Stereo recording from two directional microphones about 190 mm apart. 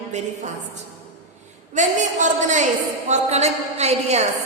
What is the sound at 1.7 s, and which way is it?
A woman's voice, 40° right (ahead or behind).